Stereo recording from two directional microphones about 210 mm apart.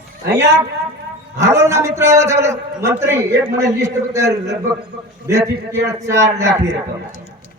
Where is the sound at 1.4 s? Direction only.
15° right (ahead or behind).